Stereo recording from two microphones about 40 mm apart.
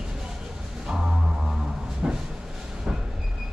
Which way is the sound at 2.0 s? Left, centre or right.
Right.